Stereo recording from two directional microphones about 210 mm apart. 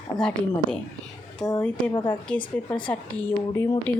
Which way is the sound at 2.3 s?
5° left (ahead or behind).